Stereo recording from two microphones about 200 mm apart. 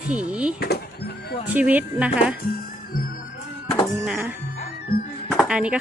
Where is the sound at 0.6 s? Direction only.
55° left (ahead or behind).